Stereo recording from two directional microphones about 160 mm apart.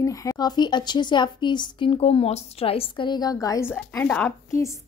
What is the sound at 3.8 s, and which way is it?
Speech, 5° left (ahead or behind).